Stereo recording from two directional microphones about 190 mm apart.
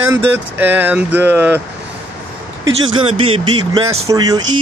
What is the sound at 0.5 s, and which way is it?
Speech, 10° right (ahead or behind).